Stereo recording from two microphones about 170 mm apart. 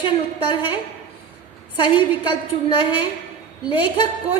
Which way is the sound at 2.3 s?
30° left (ahead or behind).